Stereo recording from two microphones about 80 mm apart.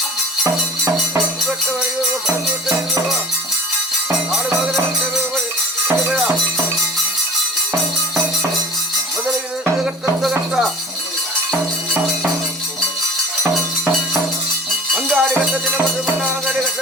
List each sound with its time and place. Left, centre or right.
1.5 s music: centre
4.6 s music: centre
9.8 s music: centre
14.9 s music: centre